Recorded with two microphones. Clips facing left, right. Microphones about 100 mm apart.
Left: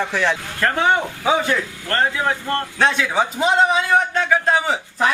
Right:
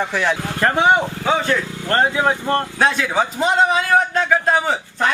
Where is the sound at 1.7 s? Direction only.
20° right (ahead or behind).